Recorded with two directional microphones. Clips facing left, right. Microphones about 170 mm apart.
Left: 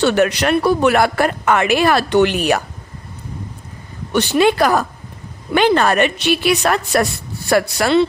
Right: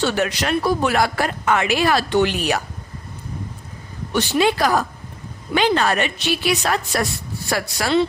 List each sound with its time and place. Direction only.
0.0 s speech: 60° left (ahead or behind)
4.1 s speech: 55° left (ahead or behind)